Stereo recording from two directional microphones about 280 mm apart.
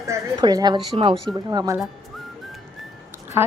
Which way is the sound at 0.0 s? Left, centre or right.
Centre.